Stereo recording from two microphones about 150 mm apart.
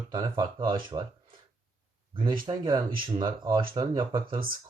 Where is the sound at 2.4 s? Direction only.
30° right (ahead or behind).